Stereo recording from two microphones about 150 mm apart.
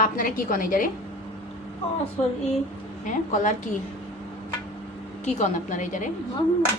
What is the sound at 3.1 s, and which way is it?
Speech, 55° left (ahead or behind).